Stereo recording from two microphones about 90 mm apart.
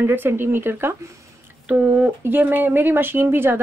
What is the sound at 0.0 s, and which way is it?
Speech, 25° right (ahead or behind).